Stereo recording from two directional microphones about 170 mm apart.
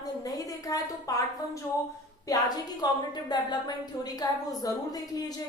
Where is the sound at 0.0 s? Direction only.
20° left (ahead or behind).